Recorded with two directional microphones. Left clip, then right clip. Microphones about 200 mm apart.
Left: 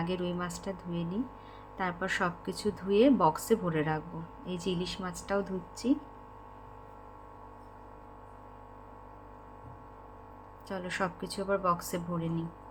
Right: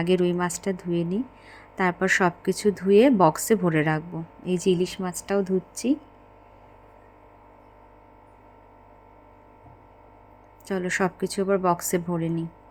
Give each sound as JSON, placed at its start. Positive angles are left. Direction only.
{"t": 0.0, "sound": "speech", "side_deg": -40}
{"t": 10.7, "sound": "speech", "side_deg": -35}